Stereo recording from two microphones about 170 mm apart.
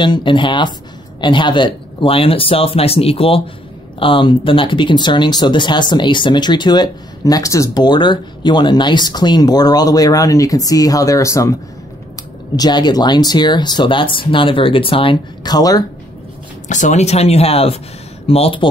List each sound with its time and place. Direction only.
0.0 s speech: 30° left (ahead or behind)
12.5 s speech: 25° left (ahead or behind)
16.6 s speech: 45° left (ahead or behind)